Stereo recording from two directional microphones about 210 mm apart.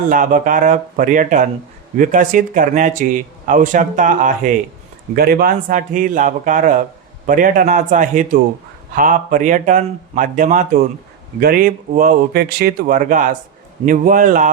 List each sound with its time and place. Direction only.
0.1 s a man's voice: 40° right (ahead or behind)